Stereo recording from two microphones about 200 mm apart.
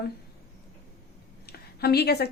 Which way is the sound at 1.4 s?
50° left (ahead or behind).